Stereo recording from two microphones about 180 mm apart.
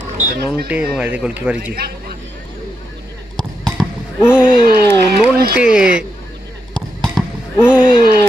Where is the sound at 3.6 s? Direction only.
5° right (ahead or behind).